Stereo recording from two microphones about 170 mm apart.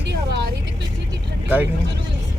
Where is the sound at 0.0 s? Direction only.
90° right.